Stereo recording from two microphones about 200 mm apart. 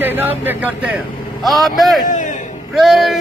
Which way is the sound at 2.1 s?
40° left (ahead or behind).